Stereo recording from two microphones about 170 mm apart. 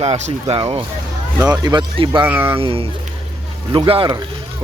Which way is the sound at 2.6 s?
35° right (ahead or behind).